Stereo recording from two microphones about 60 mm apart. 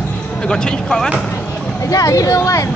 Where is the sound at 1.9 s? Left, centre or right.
Left.